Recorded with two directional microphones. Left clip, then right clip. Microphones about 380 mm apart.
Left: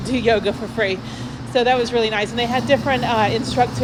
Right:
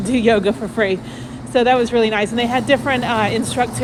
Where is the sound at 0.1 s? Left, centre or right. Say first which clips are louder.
Right 2 dB; centre.